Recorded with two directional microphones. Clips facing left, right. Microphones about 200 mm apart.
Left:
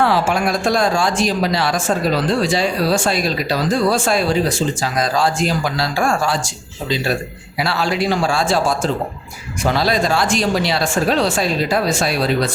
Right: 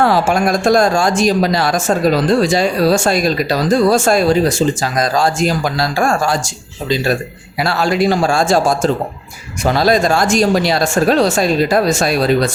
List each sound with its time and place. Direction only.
0.0 s speech: 45° right (ahead or behind)
7.6 s speech: 45° right (ahead or behind)